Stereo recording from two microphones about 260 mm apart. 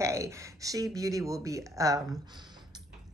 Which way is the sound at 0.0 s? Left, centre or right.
Centre.